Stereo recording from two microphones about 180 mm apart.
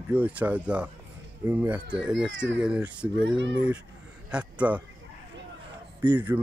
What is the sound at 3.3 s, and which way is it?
Speech, 90° right.